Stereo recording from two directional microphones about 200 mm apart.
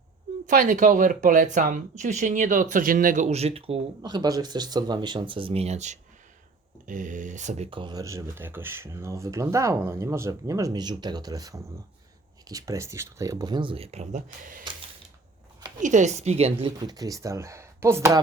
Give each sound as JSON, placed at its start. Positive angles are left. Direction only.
{"t": 0.4, "sound": "speech", "side_deg": -40}
{"t": 15.8, "sound": "speech", "side_deg": -35}